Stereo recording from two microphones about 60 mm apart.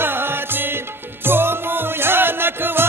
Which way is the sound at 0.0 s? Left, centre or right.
Right.